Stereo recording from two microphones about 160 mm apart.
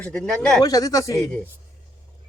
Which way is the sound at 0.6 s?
25° left (ahead or behind).